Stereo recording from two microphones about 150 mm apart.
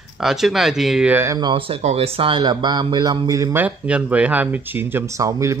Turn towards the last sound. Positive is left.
turn(degrees=-20)  # may be behind; listen again after turning